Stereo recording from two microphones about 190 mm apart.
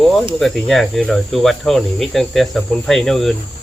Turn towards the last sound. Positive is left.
turn(degrees=0)  # may be behind; listen again after turning